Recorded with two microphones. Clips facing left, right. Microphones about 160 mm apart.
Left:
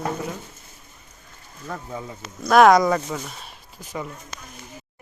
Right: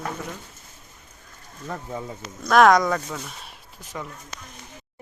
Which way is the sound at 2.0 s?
5° left (ahead or behind).